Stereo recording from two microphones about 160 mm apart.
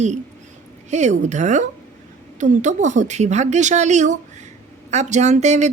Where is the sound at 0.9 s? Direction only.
45° right (ahead or behind).